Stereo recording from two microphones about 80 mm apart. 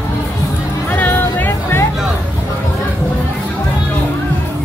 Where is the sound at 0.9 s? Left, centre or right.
Left.